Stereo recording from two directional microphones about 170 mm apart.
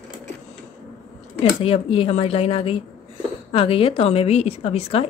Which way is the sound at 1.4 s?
35° left (ahead or behind).